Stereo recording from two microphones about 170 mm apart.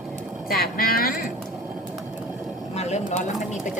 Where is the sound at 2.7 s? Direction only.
40° left (ahead or behind).